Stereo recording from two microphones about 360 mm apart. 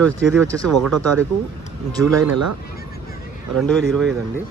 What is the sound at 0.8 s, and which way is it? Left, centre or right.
Speech, right.